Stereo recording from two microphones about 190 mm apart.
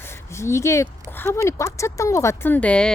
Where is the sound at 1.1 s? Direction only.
10° left (ahead or behind).